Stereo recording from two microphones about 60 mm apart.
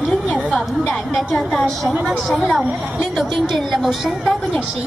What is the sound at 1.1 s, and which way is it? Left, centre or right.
A woman's voice, centre.